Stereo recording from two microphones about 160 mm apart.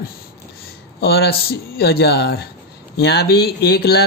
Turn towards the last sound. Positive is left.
turn(degrees=80)